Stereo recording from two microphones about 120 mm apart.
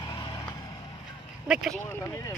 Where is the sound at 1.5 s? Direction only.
5° right (ahead or behind).